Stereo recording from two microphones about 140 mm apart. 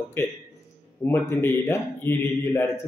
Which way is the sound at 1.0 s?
15° left (ahead or behind).